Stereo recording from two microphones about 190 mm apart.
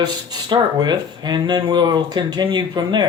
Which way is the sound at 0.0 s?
20° right (ahead or behind).